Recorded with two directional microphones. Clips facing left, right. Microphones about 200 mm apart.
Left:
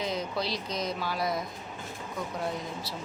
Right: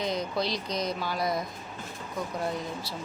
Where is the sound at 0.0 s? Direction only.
5° left (ahead or behind).